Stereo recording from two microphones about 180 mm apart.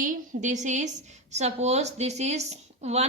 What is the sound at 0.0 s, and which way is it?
A woman's voice, 45° right (ahead or behind).